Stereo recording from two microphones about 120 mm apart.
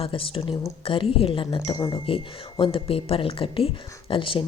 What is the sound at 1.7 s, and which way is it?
Speech, 30° left (ahead or behind).